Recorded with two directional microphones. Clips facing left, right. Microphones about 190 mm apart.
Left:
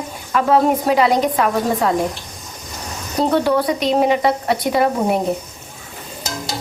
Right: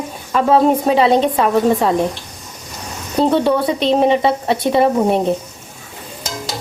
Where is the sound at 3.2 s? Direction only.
25° right (ahead or behind).